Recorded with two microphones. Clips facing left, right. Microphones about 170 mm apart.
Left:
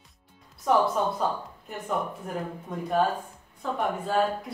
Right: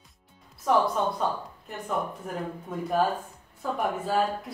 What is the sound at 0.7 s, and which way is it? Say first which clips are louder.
Speech: even; centre (ahead or behind).